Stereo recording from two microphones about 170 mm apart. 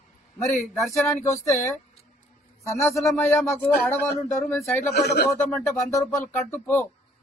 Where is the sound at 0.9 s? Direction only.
20° left (ahead or behind).